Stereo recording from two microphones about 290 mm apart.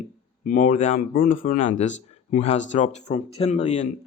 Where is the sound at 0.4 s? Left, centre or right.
Left.